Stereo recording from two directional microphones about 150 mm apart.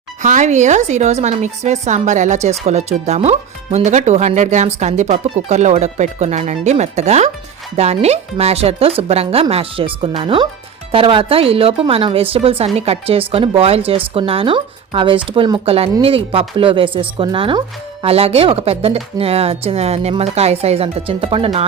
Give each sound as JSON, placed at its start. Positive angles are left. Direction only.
{"t": 0.2, "sound": "a woman's voice", "side_deg": -55}